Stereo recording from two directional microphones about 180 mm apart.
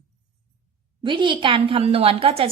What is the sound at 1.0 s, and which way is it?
A woman's voice, 25° right (ahead or behind).